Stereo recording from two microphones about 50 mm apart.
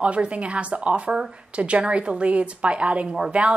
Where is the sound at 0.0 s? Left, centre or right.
Right.